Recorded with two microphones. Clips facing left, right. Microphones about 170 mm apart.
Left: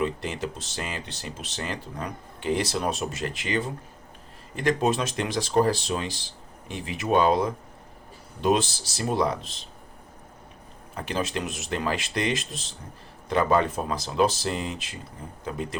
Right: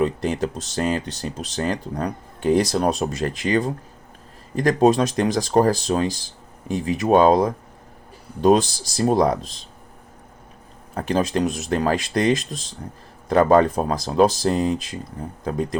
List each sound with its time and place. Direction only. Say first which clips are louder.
0.0 s speech: right 7 dB; 40° right (ahead or behind)
10.9 s speech: right 8 dB; 40° right (ahead or behind)